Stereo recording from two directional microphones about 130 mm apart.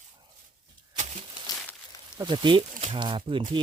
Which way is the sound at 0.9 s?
65° right (ahead or behind).